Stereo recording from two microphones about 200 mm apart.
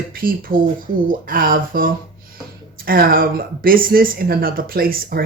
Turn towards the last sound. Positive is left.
turn(degrees=-50)  # may be behind; listen again after turning